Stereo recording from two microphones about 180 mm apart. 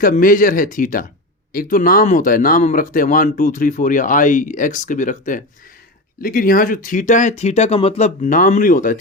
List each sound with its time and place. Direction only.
0.0 s speech: 50° left (ahead or behind)